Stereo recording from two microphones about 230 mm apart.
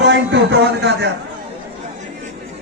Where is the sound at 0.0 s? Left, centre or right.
Right.